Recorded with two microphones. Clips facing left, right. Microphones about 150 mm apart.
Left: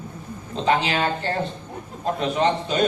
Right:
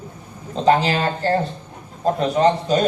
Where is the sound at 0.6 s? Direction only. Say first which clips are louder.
Right 4 dB; 40° right (ahead or behind).